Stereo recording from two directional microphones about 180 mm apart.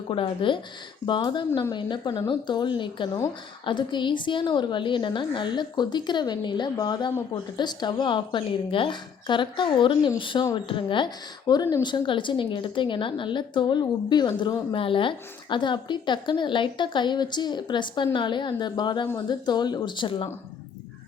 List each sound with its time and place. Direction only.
0.1 s a woman's voice: 25° left (ahead or behind)